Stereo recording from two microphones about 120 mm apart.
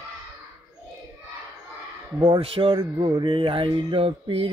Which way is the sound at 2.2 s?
50° right (ahead or behind).